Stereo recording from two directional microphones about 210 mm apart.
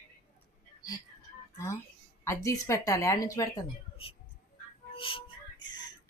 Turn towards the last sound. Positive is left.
turn(degrees=25)  # may be behind; listen again after turning